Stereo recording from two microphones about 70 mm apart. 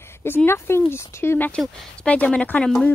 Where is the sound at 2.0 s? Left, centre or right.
Centre.